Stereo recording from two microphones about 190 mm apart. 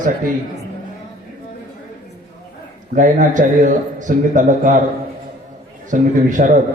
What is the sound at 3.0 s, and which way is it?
A man's voice, 40° right (ahead or behind).